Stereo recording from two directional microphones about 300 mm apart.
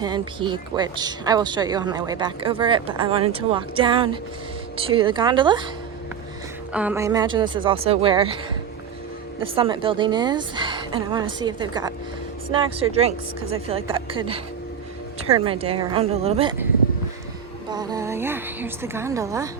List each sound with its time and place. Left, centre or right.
0.0 s speech: centre
6.7 s speech: centre
9.4 s a woman's voice: centre
17.7 s speech: centre